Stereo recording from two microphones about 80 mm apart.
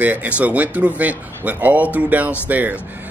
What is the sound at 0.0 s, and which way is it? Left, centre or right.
Speech, right.